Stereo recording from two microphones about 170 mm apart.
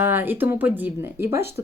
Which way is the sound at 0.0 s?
10° right (ahead or behind).